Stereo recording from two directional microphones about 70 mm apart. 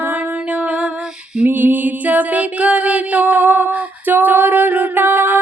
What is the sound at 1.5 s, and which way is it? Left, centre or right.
Music, right.